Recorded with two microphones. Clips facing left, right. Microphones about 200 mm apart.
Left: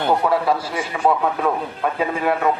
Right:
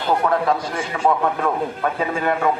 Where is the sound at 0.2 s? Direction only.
5° left (ahead or behind).